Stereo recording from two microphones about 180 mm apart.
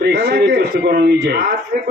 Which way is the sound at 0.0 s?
65° right (ahead or behind).